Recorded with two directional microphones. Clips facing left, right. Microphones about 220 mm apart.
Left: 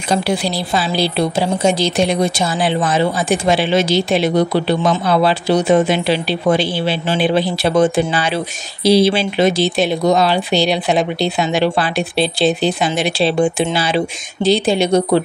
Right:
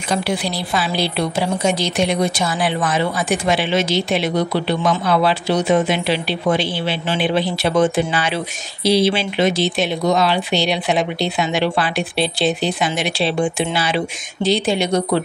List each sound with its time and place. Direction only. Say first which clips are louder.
0.1 s a woman's voice: left 3 dB; 30° left (ahead or behind)